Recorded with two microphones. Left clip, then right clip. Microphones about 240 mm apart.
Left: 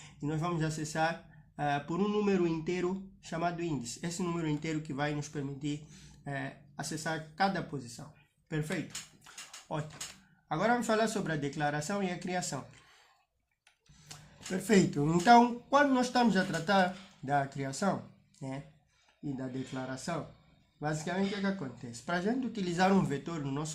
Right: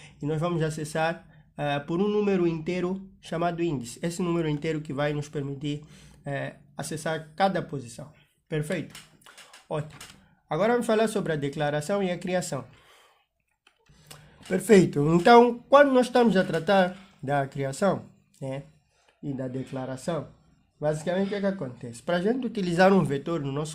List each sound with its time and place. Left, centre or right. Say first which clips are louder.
0.2 s speech: right 7 dB; right
8.4 s a sound: right 6 dB; right
10.5 s speech: right 6 dB; right
14.1 s speech: right 9 dB; right